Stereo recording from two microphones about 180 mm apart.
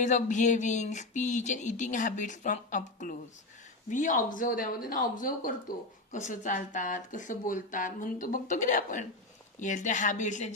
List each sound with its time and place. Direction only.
0.0 s speech: 40° left (ahead or behind)